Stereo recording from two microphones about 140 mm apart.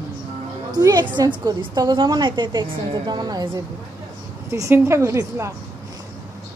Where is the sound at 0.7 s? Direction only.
30° right (ahead or behind).